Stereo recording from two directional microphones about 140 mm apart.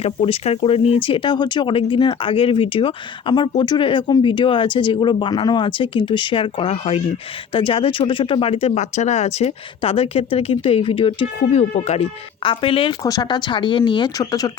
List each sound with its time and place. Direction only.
0.0 s speech: 45° left (ahead or behind)
13.0 s speech: 25° left (ahead or behind)